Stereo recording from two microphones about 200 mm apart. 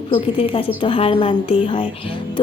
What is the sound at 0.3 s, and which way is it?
A woman's voice, 30° left (ahead or behind).